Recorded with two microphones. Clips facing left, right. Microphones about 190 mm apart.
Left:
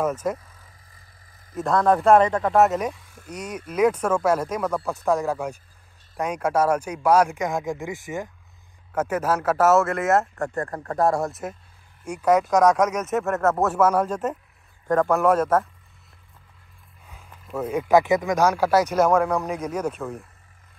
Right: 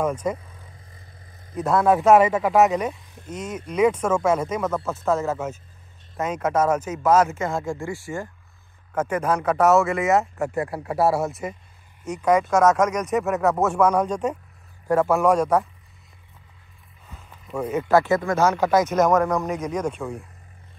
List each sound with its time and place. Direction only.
0.0 s speech: 5° left (ahead or behind)
1.5 s speech: 5° right (ahead or behind); by 8.3 s 20° left (ahead or behind)
8.9 s speech: 5° left (ahead or behind)
14.9 s speech: 5° right (ahead or behind)
17.1 s a sound: 5° left (ahead or behind)
17.8 s speech: 15° left (ahead or behind); by 20.2 s centre (ahead or behind)